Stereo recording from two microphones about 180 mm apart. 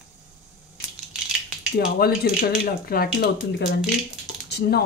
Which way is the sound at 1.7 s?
55° left (ahead or behind).